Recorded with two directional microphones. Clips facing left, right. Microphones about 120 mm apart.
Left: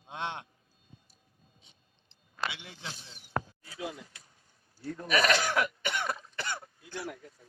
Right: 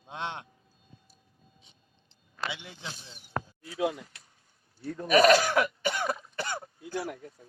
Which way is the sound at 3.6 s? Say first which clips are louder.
Right 9 dB; 90° right.